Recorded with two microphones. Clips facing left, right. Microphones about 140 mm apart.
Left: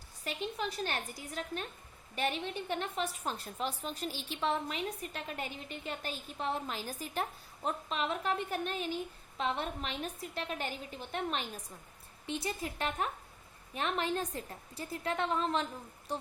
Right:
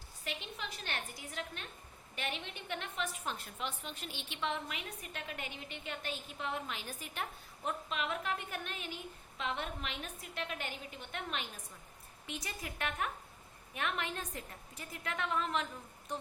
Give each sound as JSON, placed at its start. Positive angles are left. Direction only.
{"t": 0.3, "sound": "a woman's voice", "side_deg": 40}